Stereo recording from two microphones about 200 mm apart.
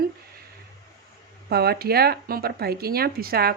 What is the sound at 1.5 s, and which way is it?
Speech, 50° right (ahead or behind).